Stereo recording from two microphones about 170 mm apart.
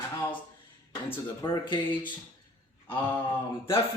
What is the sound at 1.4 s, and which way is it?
Speech, 25° left (ahead or behind).